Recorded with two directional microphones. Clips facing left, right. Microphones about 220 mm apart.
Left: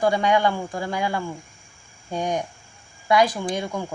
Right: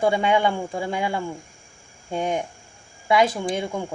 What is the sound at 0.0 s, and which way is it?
Speech, 25° right (ahead or behind).